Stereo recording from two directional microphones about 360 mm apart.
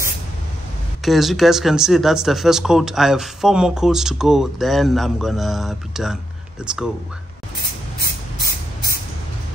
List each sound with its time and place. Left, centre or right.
1.0 s speech: centre